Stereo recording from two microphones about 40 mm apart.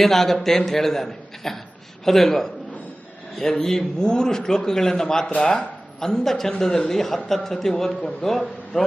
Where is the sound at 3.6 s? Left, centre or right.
Centre.